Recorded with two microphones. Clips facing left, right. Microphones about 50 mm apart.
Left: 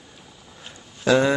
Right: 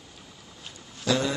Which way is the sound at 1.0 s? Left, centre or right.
Left.